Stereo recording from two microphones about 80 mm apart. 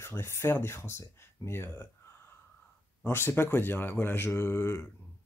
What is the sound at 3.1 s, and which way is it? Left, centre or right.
Speech, left.